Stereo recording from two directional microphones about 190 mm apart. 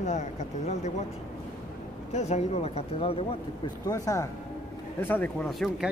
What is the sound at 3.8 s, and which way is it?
Speech, 15° left (ahead or behind).